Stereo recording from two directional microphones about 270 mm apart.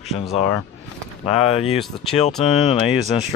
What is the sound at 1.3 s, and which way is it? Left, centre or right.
Speech, left.